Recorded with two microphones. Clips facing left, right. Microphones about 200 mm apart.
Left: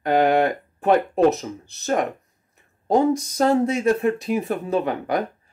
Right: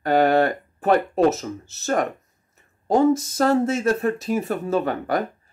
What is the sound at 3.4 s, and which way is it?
Speech, 15° left (ahead or behind).